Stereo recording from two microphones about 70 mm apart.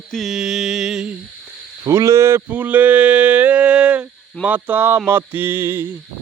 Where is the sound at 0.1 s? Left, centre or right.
Centre.